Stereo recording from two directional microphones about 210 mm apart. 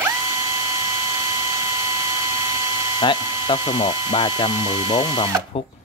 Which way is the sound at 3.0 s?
25° left (ahead or behind).